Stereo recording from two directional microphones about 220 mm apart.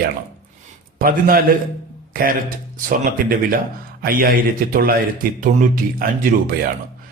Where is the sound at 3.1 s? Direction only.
40° right (ahead or behind).